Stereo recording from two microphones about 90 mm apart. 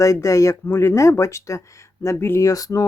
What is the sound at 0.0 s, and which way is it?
Speech, 40° left (ahead or behind).